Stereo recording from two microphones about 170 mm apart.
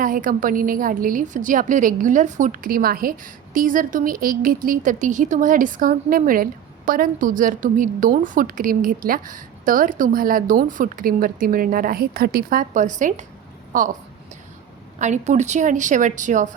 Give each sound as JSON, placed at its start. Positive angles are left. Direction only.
{"t": 0.0, "sound": "a woman's voice", "side_deg": -55}
{"t": 14.9, "sound": "a woman's voice", "side_deg": -45}